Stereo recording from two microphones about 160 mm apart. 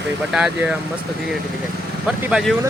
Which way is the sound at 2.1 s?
5° right (ahead or behind).